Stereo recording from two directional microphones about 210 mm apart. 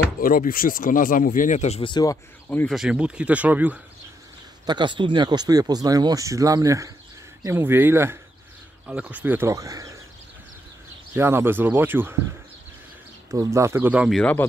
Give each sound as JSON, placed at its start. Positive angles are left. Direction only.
{"t": 0.2, "sound": "speech", "side_deg": 40}
{"t": 2.7, "sound": "speech", "side_deg": -5}
{"t": 4.6, "sound": "speech", "side_deg": -20}
{"t": 11.1, "sound": "speech", "side_deg": -10}
{"t": 13.3, "sound": "speech", "side_deg": -15}